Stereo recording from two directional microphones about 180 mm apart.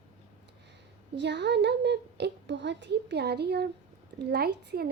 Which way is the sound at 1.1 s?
75° right (ahead or behind).